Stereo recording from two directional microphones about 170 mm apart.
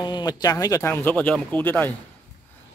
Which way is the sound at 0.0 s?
25° left (ahead or behind).